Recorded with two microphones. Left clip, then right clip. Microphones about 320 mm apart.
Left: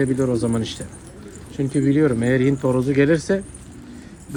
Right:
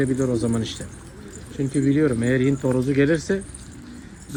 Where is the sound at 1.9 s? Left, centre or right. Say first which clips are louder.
Left 2 dB; left.